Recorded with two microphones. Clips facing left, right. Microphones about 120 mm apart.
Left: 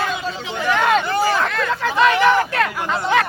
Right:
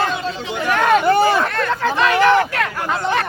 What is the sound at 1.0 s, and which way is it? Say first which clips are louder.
Speech: right 5 dB; 60° right (ahead or behind).